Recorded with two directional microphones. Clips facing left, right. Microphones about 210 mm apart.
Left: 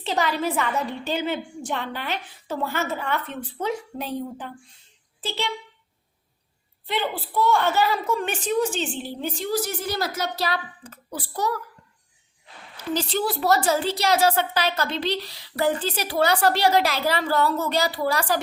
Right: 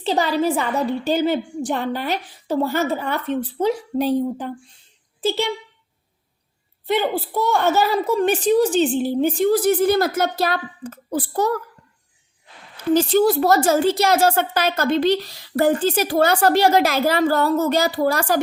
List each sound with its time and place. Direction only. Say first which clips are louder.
0.0 s a woman's voice: right 5 dB; 35° right (ahead or behind)
6.8 s a woman's voice: right 7 dB; 45° right (ahead or behind)
12.9 s a woman's voice: right 10 dB; 50° right (ahead or behind)